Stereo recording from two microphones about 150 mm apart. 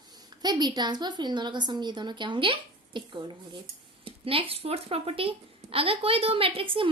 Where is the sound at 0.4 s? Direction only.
30° right (ahead or behind).